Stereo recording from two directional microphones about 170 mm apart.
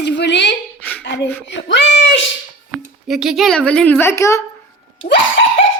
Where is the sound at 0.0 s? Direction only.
85° left.